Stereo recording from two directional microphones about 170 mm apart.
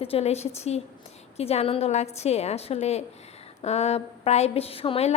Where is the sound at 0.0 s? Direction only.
35° left (ahead or behind).